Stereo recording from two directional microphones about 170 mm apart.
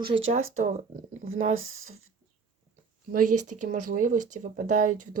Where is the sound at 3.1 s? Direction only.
50° right (ahead or behind).